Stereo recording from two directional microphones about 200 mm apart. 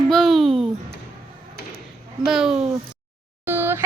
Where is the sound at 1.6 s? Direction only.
50° left (ahead or behind).